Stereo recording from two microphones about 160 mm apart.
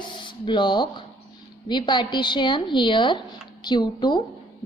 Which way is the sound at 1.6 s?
30° left (ahead or behind).